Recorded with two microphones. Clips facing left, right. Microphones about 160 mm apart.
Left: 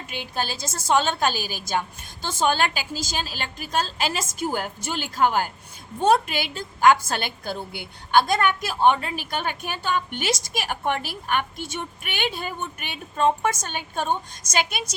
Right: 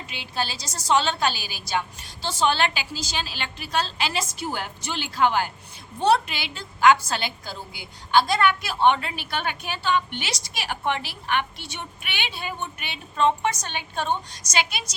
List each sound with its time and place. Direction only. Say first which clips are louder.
0.1 s a woman's voice: left 1 dB; 50° left (ahead or behind)